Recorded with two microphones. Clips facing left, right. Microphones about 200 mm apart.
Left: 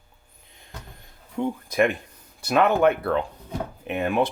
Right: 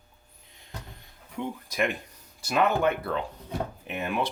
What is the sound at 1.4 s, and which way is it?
Speech, 55° left (ahead or behind).